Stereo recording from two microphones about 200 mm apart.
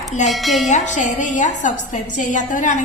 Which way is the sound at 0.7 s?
40° left (ahead or behind).